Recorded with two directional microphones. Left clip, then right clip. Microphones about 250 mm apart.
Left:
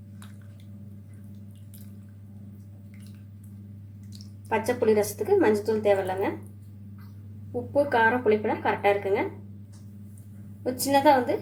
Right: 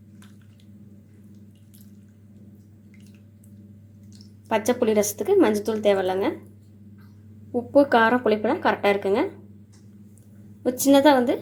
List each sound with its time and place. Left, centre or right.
4.4 s a woman's voice: right
7.7 s a woman's voice: right
10.6 s a woman's voice: right